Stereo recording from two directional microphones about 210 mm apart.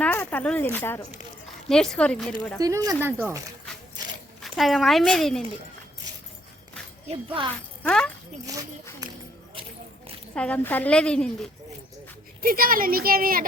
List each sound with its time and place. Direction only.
0.0 s a woman's voice: 10° left (ahead or behind)
2.6 s speech: 15° right (ahead or behind)
4.4 s speech: centre (ahead or behind)
7.1 s speech: 25° right (ahead or behind)
7.9 s a woman's voice: 5° left (ahead or behind)
10.3 s a woman's voice: 5° left (ahead or behind)
12.4 s speech: 45° right (ahead or behind)